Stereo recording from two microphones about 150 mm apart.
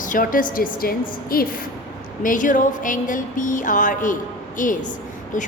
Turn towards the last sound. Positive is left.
turn(degrees=60)  # may be behind; listen again after turning